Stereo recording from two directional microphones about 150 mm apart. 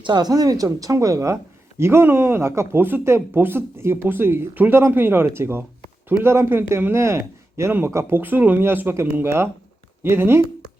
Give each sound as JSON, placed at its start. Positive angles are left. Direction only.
{"t": 0.0, "sound": "a woman's voice", "side_deg": -30}